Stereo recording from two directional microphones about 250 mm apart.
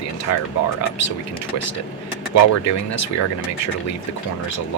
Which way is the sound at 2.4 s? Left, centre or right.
Left.